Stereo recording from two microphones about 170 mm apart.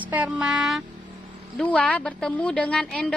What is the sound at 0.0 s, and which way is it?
Vehicle, 10° right (ahead or behind).